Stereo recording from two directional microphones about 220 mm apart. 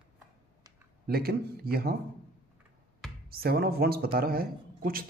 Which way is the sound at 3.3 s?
45° right (ahead or behind).